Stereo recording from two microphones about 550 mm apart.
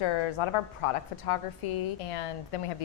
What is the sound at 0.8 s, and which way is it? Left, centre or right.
Speech, left.